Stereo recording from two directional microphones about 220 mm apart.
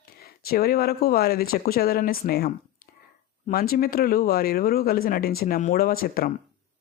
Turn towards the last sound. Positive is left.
turn(degrees=40)  # may be behind; listen again after turning